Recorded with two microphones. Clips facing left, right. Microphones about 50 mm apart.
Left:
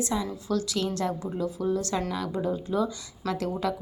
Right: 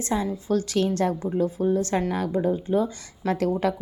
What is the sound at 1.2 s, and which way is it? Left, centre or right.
Speech, right.